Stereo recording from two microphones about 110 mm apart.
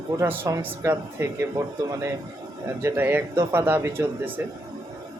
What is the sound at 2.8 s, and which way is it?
Speech, 20° right (ahead or behind).